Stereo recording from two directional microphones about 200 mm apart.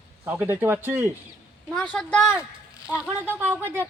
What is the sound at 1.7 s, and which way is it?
A woman's voice, 5° left (ahead or behind).